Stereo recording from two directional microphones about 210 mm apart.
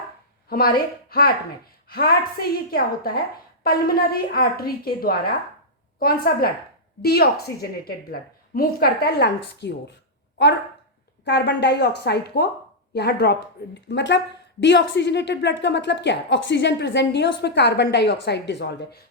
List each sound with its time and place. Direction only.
0.4 s speech: 45° left (ahead or behind)
1.9 s a woman's voice: 45° left (ahead or behind)